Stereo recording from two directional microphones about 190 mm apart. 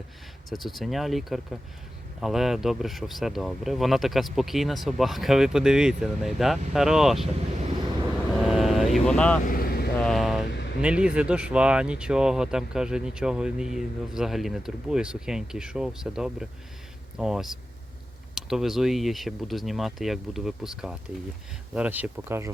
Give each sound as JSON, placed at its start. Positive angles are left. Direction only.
{"t": 0.5, "sound": "speech", "side_deg": 0}
{"t": 8.4, "sound": "vehicle", "side_deg": 0}
{"t": 9.5, "sound": "vehicle", "side_deg": 50}
{"t": 10.0, "sound": "vehicle", "side_deg": 0}
{"t": 10.5, "sound": "vehicle", "side_deg": 65}
{"t": 10.8, "sound": "speech", "side_deg": -5}